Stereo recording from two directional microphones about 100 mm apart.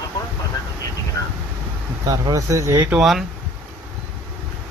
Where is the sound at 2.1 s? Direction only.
35° right (ahead or behind).